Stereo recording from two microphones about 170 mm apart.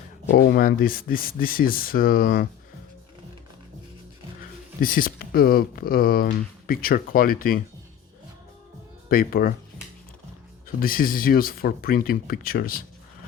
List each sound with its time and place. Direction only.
0.3 s speech: 60° left (ahead or behind)
4.8 s speech: 55° left (ahead or behind)
9.0 s speech: 60° left (ahead or behind)
10.8 s speech: 55° left (ahead or behind)